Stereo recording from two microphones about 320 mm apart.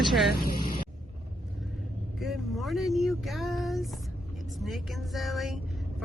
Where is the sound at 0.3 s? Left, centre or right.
Left.